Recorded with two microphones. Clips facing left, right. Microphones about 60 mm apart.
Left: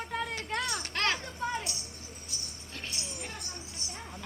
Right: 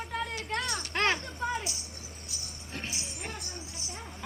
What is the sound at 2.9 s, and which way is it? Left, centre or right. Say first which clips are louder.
Music: right 1 dB; centre.